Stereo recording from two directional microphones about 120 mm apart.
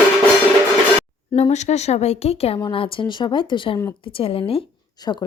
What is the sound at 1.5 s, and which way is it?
Speech, 70° left (ahead or behind).